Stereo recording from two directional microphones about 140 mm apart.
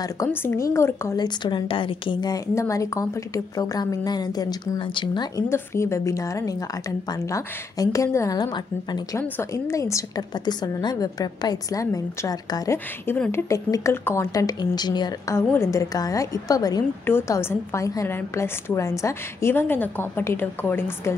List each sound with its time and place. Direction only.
0.3 s a woman's voice: 15° left (ahead or behind)
1.2 s speech: 35° left (ahead or behind)
5.5 s speech: 20° left (ahead or behind)
12.7 s a woman's voice: 15° left (ahead or behind)